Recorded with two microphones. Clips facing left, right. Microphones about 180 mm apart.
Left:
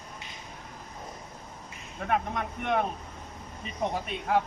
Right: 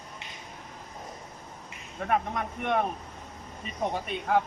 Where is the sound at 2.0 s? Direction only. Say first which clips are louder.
Right 1 dB; centre (ahead or behind).